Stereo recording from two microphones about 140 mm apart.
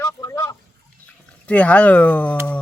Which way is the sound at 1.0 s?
10° left (ahead or behind).